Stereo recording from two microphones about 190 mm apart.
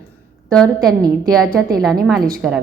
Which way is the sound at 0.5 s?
5° left (ahead or behind).